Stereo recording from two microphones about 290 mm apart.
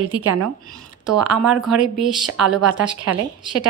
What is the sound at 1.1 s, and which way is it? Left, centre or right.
Speech, centre.